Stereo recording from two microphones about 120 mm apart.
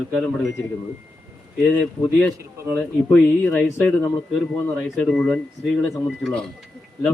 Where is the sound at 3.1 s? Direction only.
5° left (ahead or behind).